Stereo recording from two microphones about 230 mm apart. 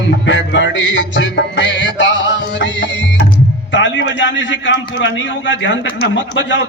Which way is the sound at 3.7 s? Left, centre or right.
Left.